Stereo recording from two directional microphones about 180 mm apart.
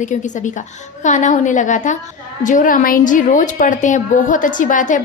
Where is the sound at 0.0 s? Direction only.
45° left (ahead or behind).